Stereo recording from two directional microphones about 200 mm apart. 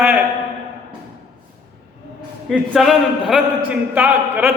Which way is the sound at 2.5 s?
Centre (ahead or behind).